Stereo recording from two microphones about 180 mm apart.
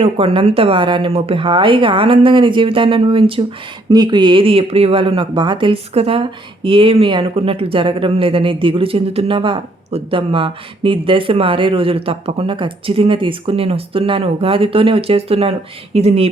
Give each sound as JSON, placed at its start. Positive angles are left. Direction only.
{"t": 0.0, "sound": "speech", "side_deg": -30}